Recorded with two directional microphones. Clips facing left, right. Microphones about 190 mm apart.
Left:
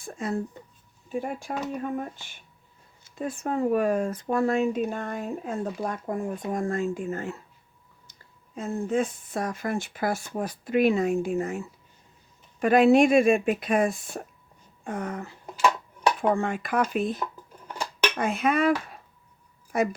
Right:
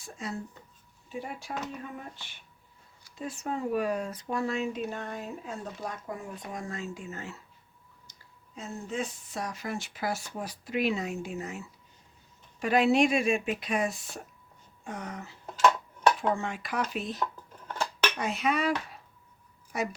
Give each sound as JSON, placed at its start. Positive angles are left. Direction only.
{"t": 0.0, "sound": "speech", "side_deg": 55}
{"t": 8.5, "sound": "speech", "side_deg": 55}
{"t": 15.4, "sound": "dishes", "side_deg": 10}
{"t": 16.3, "sound": "speech", "side_deg": 55}
{"t": 18.2, "sound": "speech", "side_deg": 50}